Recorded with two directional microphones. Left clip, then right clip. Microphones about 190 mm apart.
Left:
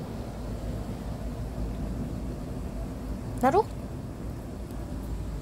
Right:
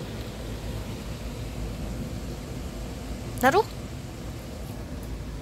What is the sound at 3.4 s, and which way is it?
Speech, 5° left (ahead or behind).